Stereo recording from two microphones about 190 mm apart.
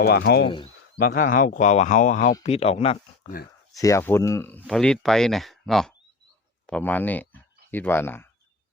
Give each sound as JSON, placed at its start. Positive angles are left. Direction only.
{"t": 0.0, "sound": "speech", "side_deg": 55}
{"t": 0.4, "sound": "speech", "side_deg": 25}
{"t": 0.9, "sound": "speech", "side_deg": 50}